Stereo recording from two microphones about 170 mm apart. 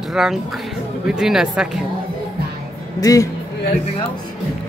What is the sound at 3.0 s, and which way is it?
Speech, 20° left (ahead or behind).